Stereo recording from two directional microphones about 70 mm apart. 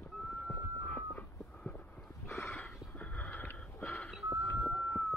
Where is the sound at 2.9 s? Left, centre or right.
Left.